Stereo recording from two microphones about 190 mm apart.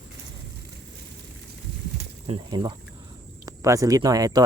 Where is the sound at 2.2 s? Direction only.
25° right (ahead or behind).